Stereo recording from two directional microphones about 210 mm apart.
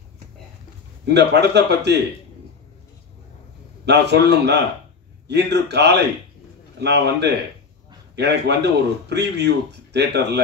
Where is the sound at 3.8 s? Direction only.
55° right (ahead or behind).